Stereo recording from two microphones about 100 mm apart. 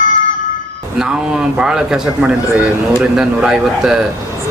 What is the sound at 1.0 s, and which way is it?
Speech, 5° right (ahead or behind).